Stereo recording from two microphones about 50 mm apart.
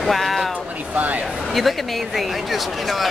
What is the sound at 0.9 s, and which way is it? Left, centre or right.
Speech, right.